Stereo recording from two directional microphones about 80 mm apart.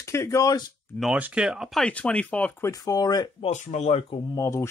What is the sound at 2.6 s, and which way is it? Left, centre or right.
Speech, left.